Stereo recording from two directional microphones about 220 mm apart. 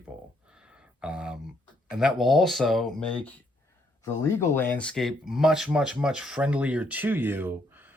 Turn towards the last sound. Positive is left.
turn(degrees=-10)  # may be behind; listen again after turning